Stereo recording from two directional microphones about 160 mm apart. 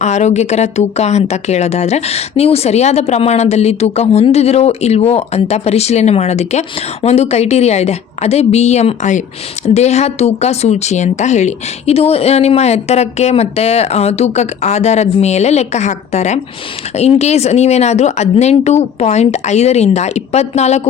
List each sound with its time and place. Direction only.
0.0 s speech: 45° left (ahead or behind)